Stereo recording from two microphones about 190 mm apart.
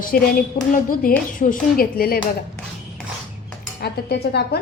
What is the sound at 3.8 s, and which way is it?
Speech, 60° left (ahead or behind).